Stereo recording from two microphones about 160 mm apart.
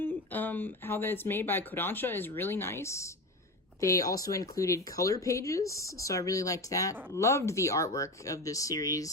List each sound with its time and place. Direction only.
0.0 s speech: 10° left (ahead or behind)